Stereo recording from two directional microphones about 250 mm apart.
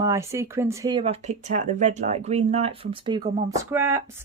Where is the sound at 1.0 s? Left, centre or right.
Right.